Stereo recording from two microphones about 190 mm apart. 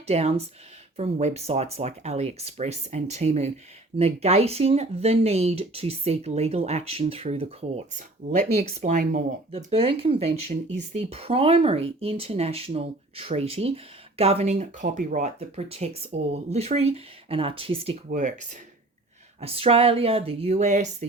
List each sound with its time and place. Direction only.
0.1 s speech: 35° right (ahead or behind)
18.1 s speech: 40° right (ahead or behind)